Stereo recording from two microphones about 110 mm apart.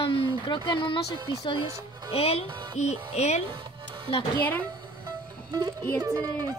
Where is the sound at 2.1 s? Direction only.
60° left (ahead or behind); by 3.4 s 90° left.